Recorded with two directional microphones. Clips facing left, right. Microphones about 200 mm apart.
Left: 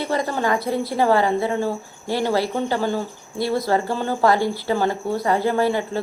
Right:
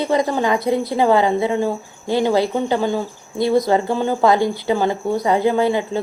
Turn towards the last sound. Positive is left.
turn(degrees=-20)  # may be behind; listen again after turning